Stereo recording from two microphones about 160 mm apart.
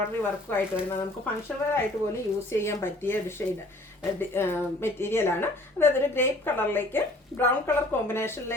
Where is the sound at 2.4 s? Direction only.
15° left (ahead or behind).